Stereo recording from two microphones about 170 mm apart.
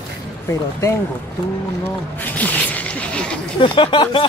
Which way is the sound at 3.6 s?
30° left (ahead or behind).